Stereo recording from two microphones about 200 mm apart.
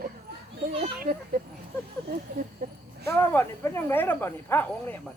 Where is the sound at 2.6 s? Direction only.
55° right (ahead or behind).